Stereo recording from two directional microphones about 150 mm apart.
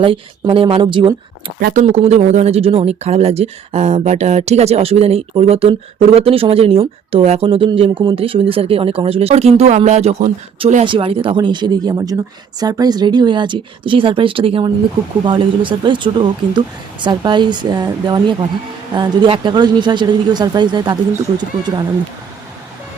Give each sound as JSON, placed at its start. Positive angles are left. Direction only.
{"t": 0.0, "sound": "speech", "side_deg": -35}
{"t": 1.5, "sound": "speech", "side_deg": -85}
{"t": 1.8, "sound": "speech", "side_deg": -50}
{"t": 10.8, "sound": "speech", "side_deg": -35}